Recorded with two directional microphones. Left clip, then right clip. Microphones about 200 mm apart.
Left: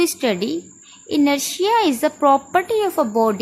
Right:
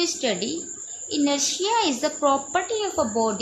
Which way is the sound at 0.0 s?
35° left (ahead or behind).